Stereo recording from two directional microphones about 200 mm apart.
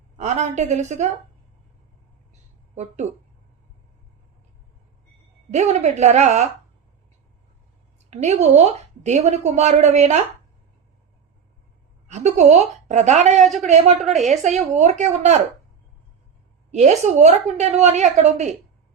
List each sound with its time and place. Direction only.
0.2 s a woman's voice: 35° right (ahead or behind)
2.7 s a woman's voice: 35° right (ahead or behind)
5.5 s a woman's voice: 35° right (ahead or behind)
8.1 s a woman's voice: 35° right (ahead or behind)
12.0 s a woman's voice: 35° right (ahead or behind)
13.4 s speech: centre (ahead or behind)
14.3 s a woman's voice: 35° right (ahead or behind)
16.7 s a woman's voice: 35° right (ahead or behind)